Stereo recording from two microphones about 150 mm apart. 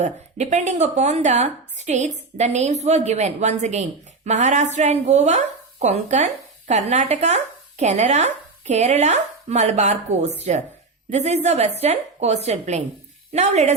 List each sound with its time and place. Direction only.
0.0 s a woman's voice: 50° right (ahead or behind)